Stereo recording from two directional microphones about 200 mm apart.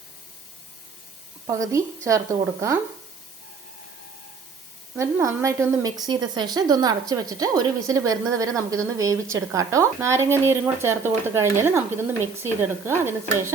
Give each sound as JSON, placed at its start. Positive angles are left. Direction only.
{"t": 1.5, "sound": "speech", "side_deg": -15}
{"t": 4.9, "sound": "speech", "side_deg": -15}